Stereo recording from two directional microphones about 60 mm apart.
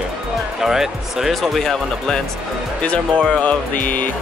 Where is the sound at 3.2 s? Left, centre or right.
Centre.